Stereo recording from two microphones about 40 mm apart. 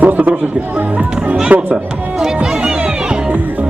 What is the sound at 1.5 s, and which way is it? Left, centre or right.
Speech, right.